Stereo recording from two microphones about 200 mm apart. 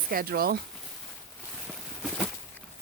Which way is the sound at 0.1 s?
50° right (ahead or behind).